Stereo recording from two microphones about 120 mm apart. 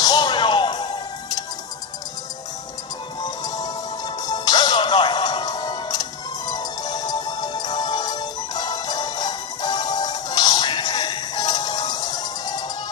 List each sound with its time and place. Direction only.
0.0 s music: 35° left (ahead or behind)
3.2 s music: 35° left (ahead or behind)